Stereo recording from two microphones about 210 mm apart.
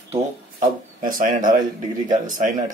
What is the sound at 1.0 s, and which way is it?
Speech, 40° right (ahead or behind).